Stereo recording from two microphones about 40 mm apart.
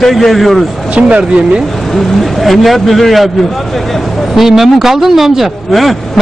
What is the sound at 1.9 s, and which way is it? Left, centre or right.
Speech, centre.